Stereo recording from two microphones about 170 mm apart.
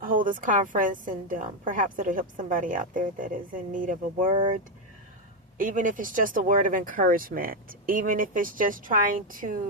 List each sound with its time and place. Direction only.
0.0 s a woman's voice: 55° right (ahead or behind)
4.3 s speech: 30° right (ahead or behind)
5.5 s a woman's voice: 50° right (ahead or behind)